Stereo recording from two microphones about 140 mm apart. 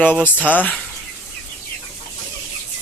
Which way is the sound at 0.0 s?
10° left (ahead or behind).